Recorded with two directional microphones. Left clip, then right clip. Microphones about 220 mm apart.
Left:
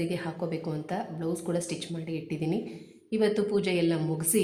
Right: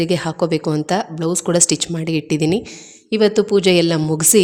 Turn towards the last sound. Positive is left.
turn(degrees=-45)  # may be behind; listen again after turning